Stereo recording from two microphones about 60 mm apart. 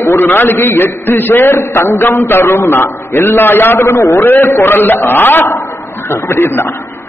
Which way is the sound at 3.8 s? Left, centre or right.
Left.